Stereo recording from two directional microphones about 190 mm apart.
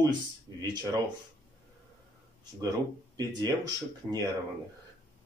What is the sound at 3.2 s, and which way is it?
Speech, 20° right (ahead or behind).